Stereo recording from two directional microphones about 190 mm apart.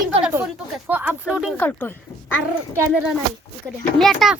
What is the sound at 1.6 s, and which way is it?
A child's voice, 10° left (ahead or behind).